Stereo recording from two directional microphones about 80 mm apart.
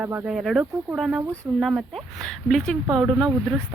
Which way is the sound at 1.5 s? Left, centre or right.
Right.